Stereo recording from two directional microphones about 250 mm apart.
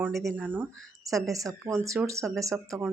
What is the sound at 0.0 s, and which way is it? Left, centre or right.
Speech, centre.